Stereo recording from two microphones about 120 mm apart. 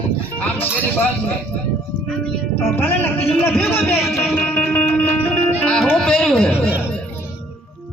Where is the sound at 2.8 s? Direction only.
15° left (ahead or behind).